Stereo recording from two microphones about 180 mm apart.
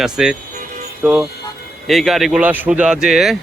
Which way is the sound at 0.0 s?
5° right (ahead or behind).